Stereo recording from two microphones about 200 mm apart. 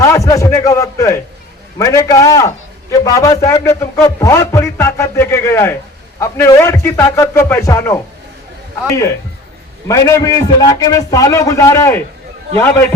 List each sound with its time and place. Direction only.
0.0 s a man's voice: 15° left (ahead or behind)